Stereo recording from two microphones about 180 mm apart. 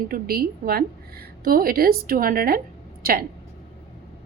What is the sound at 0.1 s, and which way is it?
A woman's voice, 55° right (ahead or behind).